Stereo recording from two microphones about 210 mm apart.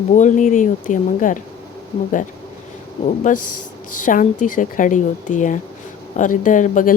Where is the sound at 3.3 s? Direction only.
35° left (ahead or behind).